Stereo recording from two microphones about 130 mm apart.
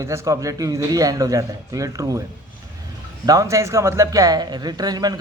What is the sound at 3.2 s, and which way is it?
A man's voice, 25° right (ahead or behind).